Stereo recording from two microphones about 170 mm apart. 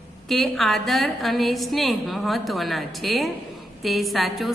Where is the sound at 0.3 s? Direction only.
Centre (ahead or behind).